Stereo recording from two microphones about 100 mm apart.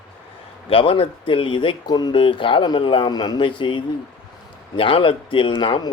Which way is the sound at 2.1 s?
60° left (ahead or behind).